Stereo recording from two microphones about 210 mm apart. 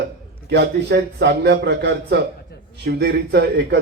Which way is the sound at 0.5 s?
50° right (ahead or behind).